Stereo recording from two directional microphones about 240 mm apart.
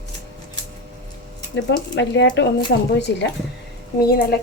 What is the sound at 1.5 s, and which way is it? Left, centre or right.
Speech, left.